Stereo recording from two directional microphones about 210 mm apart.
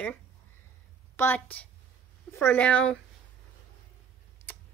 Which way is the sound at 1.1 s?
10° left (ahead or behind).